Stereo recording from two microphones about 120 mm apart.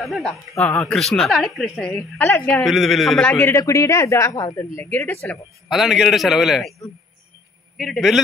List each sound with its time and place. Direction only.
0.0 s speech: centre (ahead or behind)
3.2 s speech: 15° left (ahead or behind)
4.8 s speech: 15° left (ahead or behind)
5.7 s speech: centre (ahead or behind)
7.7 s speech: centre (ahead or behind)